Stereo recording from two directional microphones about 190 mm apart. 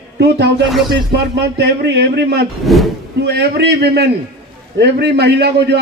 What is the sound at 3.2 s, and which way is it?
A man's voice, 60° right (ahead or behind).